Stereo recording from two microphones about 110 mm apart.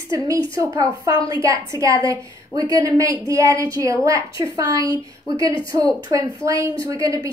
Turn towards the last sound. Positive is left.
turn(degrees=-35)  # may be behind; listen again after turning